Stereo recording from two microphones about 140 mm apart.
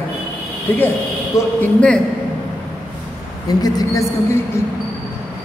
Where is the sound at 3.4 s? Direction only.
25° left (ahead or behind).